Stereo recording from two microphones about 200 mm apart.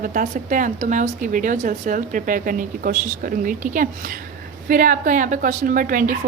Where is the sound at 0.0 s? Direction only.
40° right (ahead or behind).